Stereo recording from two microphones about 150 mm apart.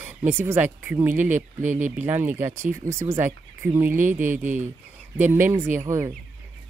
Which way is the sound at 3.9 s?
60° right (ahead or behind).